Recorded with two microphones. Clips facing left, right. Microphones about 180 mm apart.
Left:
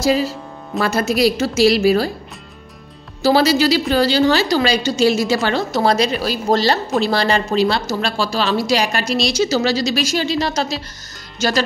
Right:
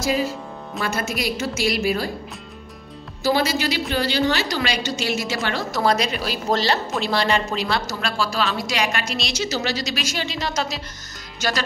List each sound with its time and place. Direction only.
0.0 s a woman's voice: 35° left (ahead or behind)
3.2 s a woman's voice: 30° left (ahead or behind)